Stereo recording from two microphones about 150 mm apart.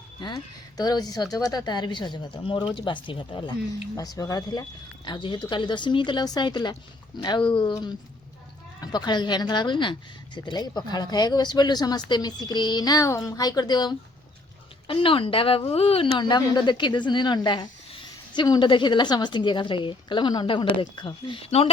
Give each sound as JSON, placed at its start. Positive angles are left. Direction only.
{"t": 0.2, "sound": "a woman's voice", "side_deg": 30}